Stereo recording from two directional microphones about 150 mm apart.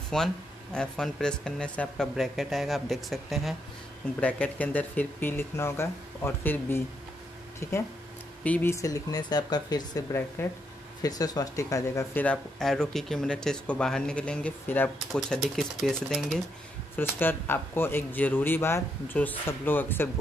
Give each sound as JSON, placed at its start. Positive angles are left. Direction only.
{"t": 0.1, "sound": "speech", "side_deg": 0}
{"t": 16.9, "sound": "speech", "side_deg": 15}